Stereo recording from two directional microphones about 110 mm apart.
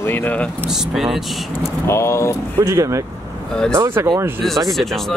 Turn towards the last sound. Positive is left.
turn(degrees=0)  # may be behind; listen again after turning